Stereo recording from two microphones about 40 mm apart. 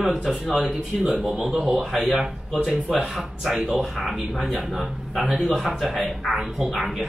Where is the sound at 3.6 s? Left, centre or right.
Right.